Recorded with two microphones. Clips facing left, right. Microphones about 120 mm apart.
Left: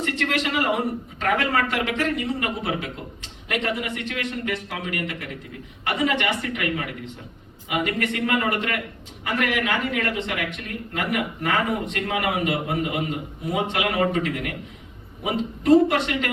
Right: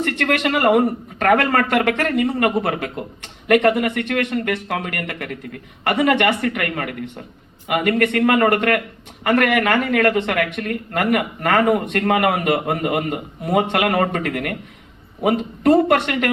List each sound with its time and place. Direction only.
0.0 s a man's voice: 55° right (ahead or behind)